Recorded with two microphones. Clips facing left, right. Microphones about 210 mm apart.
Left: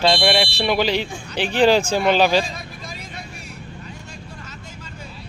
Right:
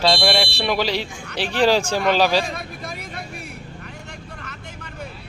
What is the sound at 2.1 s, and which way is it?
Speech, centre (ahead or behind).